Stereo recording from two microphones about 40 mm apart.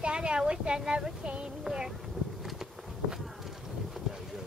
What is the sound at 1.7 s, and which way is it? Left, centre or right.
Speech, centre.